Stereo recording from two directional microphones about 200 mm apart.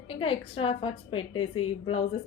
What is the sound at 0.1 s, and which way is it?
A woman's voice, 25° left (ahead or behind).